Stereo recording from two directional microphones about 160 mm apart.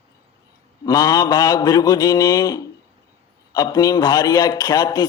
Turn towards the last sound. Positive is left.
turn(degrees=25)  # may be behind; listen again after turning